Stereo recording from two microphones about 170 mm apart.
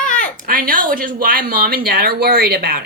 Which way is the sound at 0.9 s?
55° right (ahead or behind).